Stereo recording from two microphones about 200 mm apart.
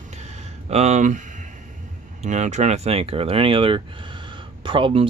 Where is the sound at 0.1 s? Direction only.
35° right (ahead or behind).